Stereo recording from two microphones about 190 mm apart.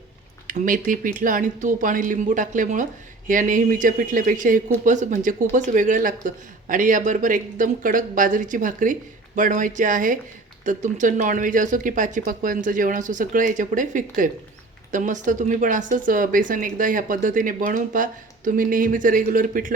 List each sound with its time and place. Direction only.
0.4 s speech: 45° right (ahead or behind)